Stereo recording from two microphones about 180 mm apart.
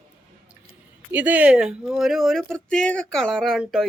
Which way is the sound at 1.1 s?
10° right (ahead or behind).